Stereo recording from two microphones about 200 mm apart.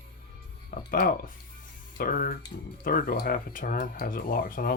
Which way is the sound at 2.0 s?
45° left (ahead or behind).